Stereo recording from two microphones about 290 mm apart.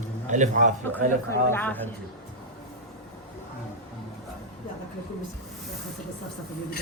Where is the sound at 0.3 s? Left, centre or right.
Right.